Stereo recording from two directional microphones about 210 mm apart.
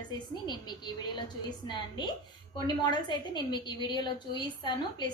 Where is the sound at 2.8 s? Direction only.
20° left (ahead or behind).